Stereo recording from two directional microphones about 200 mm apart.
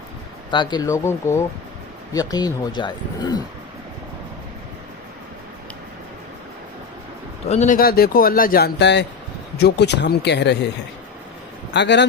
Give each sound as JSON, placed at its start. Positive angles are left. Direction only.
{"t": 0.5, "sound": "speech", "side_deg": 20}
{"t": 7.4, "sound": "speech", "side_deg": 35}
{"t": 11.7, "sound": "speech", "side_deg": 60}